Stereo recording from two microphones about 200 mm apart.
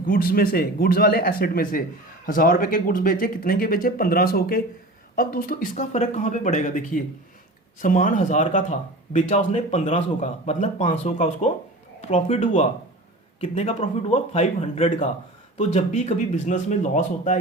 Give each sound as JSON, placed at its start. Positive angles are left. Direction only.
{"t": 0.0, "sound": "speech", "side_deg": 45}